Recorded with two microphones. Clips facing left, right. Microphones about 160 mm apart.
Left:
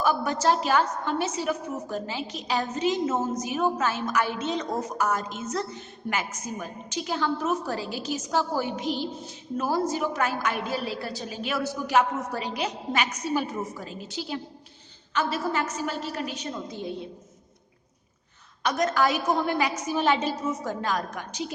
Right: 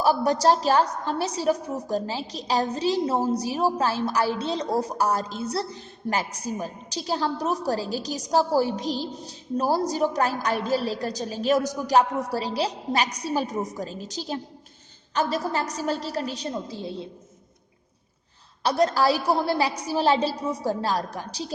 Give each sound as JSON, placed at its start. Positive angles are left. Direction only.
{"t": 0.0, "sound": "a woman's voice", "side_deg": -35}
{"t": 18.6, "sound": "a woman's voice", "side_deg": -30}